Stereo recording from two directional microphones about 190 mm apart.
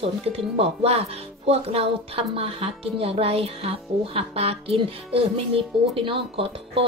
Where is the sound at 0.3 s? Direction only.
30° right (ahead or behind).